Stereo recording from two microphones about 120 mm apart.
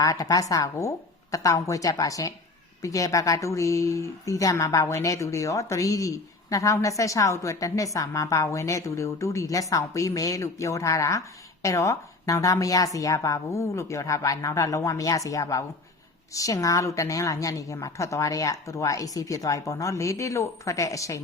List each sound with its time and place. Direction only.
0.0 s a woman's voice: 30° left (ahead or behind)